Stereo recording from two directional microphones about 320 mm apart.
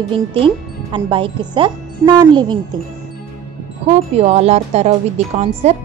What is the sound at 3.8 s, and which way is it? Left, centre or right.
Speech, centre.